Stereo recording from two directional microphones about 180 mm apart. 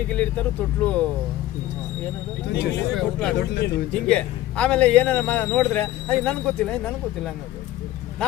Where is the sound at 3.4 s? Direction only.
70° left (ahead or behind).